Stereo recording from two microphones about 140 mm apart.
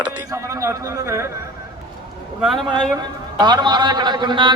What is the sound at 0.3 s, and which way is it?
A man's voice, 20° right (ahead or behind).